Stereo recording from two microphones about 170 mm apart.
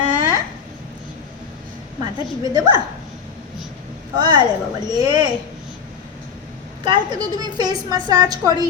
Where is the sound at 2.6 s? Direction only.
25° right (ahead or behind).